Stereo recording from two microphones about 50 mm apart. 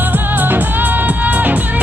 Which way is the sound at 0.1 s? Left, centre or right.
Right.